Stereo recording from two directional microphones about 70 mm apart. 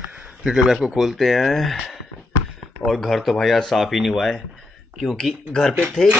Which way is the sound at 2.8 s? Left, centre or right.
Centre.